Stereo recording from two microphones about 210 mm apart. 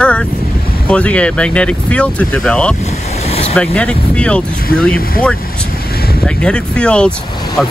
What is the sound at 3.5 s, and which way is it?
Speech, 5° left (ahead or behind).